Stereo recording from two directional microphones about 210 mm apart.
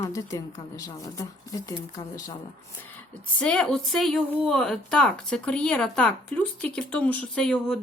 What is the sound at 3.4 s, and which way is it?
Speech, 5° left (ahead or behind).